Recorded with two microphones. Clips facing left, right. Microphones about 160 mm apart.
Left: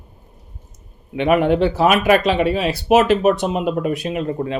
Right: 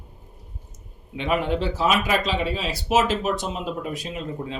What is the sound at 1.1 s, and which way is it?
Speech, 65° left (ahead or behind).